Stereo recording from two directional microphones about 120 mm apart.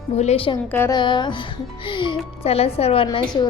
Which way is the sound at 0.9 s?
40° left (ahead or behind).